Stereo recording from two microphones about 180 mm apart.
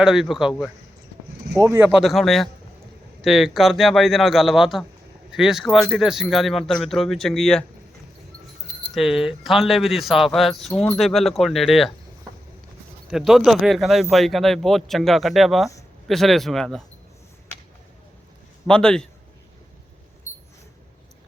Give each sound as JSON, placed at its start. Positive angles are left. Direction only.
{"t": 0.0, "sound": "speech", "side_deg": -5}
{"t": 1.6, "sound": "speech", "side_deg": -15}
{"t": 2.0, "sound": "speech", "side_deg": 0}
{"t": 9.0, "sound": "speech", "side_deg": 0}
{"t": 13.1, "sound": "speech", "side_deg": 0}
{"t": 18.7, "sound": "speech", "side_deg": 5}